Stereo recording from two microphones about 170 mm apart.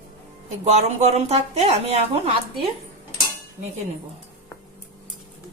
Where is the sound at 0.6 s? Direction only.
40° right (ahead or behind).